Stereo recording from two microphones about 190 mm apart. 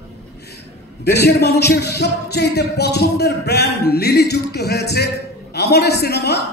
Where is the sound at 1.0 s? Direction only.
60° left (ahead or behind).